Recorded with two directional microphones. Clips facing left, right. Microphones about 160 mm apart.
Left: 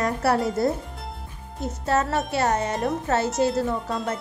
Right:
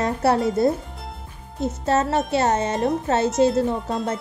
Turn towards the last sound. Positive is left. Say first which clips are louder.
# right 3 dB
turn(degrees=0)  # may be behind; listen again after turning